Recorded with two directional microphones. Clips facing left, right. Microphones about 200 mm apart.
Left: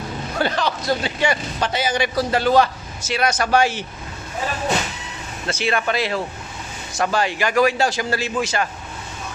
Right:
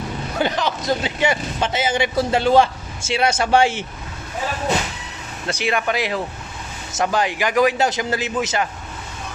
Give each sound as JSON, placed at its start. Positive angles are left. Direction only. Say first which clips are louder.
{"t": 0.3, "sound": "speech", "louder": "even", "side_deg": -15}
{"t": 5.5, "sound": "speech", "louder": "even", "side_deg": -15}